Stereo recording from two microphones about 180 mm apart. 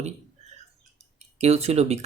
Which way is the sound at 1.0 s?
35° right (ahead or behind).